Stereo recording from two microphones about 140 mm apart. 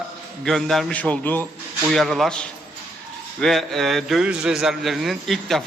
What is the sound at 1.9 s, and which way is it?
A man's voice, centre (ahead or behind).